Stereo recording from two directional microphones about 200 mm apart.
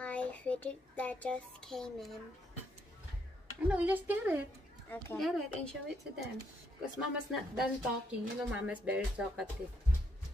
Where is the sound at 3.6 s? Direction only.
10° right (ahead or behind).